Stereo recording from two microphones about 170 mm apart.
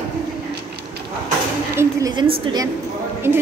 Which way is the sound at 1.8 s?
20° right (ahead or behind).